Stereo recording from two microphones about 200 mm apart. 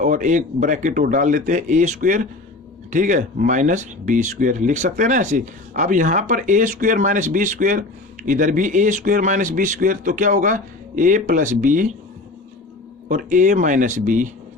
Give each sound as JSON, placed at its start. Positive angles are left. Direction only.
{"t": 0.0, "sound": "speech", "side_deg": -40}
{"t": 13.1, "sound": "speech", "side_deg": -40}